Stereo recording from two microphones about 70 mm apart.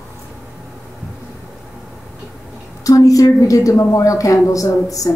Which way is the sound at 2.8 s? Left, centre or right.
Left.